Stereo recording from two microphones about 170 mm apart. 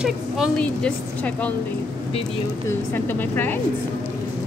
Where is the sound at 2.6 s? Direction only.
10° left (ahead or behind).